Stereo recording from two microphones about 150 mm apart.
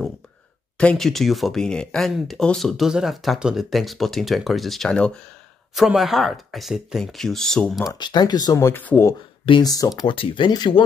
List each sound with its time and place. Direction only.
0.7 s speech: 5° left (ahead or behind)
7.9 s speech: 30° left (ahead or behind); by 9.1 s 15° left (ahead or behind)
9.5 s speech: 25° left (ahead or behind)